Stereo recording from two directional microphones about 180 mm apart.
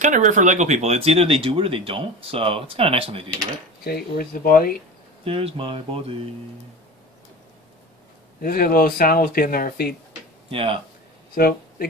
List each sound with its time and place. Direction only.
0.0 s speech: 45° right (ahead or behind)
3.8 s speech: 55° left (ahead or behind)
5.2 s speech: 30° right (ahead or behind)
8.4 s speech: 55° left (ahead or behind)
10.5 s speech: 30° right (ahead or behind)
11.3 s speech: 55° left (ahead or behind)